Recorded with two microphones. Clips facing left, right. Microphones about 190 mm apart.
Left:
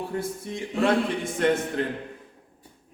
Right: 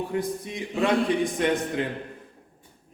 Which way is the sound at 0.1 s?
15° right (ahead or behind).